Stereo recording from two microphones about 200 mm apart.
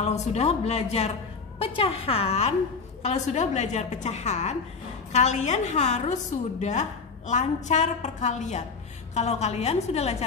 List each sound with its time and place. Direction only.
0.0 s a woman's voice: 35° left (ahead or behind)